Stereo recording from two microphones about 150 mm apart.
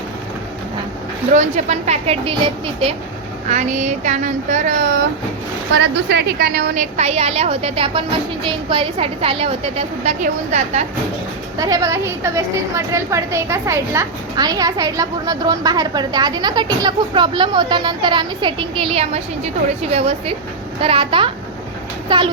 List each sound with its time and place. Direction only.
1.3 s speech: 55° right (ahead or behind); by 2.9 s 35° right (ahead or behind)
3.5 s speech: 50° right (ahead or behind)
6.1 s a woman's voice: 90° right
6.9 s a woman's voice: 45° right (ahead or behind)
11.5 s a woman's voice: 25° right (ahead or behind)